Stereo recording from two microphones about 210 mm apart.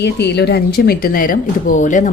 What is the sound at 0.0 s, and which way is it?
Speech, 55° left (ahead or behind).